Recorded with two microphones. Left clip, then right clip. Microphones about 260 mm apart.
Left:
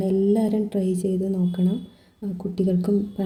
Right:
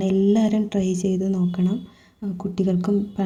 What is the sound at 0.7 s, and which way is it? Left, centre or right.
Speech, right.